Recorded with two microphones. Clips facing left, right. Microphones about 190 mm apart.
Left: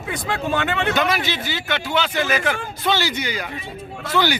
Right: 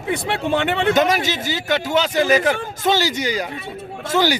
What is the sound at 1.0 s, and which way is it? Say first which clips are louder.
A man's voice: right 4 dB; 45° right (ahead or behind).